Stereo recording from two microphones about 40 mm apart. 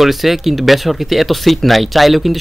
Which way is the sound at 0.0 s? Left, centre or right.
Centre.